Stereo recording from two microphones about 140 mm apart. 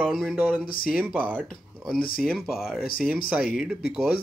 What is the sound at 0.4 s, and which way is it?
Speech, 10° right (ahead or behind).